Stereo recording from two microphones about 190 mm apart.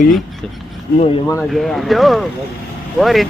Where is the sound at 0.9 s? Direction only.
35° left (ahead or behind).